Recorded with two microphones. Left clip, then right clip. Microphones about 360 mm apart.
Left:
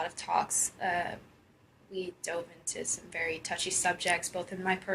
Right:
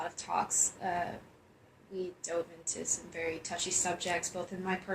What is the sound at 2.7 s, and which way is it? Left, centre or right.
Speech, left.